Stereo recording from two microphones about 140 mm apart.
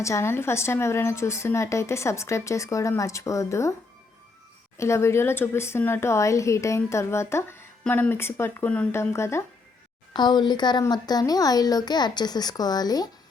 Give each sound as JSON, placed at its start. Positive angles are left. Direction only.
{"t": 0.0, "sound": "speech", "side_deg": 20}
{"t": 4.8, "sound": "speech", "side_deg": 20}
{"t": 10.1, "sound": "speech", "side_deg": 30}